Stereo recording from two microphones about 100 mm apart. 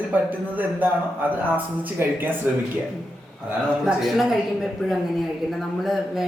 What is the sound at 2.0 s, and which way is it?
Speech, 25° right (ahead or behind).